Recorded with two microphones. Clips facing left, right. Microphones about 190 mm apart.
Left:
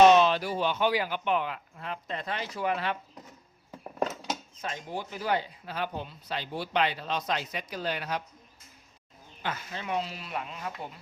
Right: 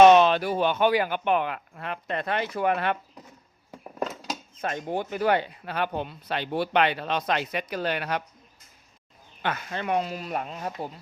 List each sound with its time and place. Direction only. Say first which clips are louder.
0.0 s speech: right 4 dB; 60° right (ahead or behind)
4.5 s speech: right 7 dB; 55° right (ahead or behind)
9.4 s speech: right 6 dB; 65° right (ahead or behind); by 10.8 s 40° right (ahead or behind)